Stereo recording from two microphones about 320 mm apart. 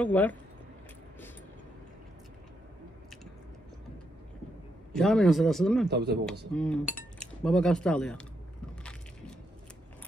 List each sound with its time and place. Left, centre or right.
0.0 s speech: centre
4.9 s speech: centre
5.9 s speech: right
6.5 s cutlery: centre